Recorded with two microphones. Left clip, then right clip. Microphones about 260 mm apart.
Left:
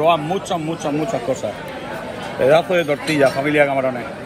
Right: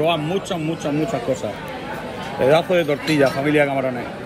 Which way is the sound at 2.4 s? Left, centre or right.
Left.